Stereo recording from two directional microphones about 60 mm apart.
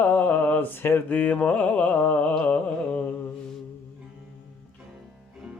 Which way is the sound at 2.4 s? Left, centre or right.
Left.